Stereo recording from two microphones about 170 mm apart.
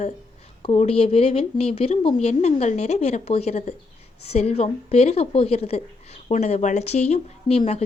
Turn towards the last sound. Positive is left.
turn(degrees=40)  # may be behind; listen again after turning